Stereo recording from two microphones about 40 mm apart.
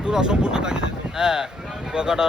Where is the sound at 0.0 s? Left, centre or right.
Centre.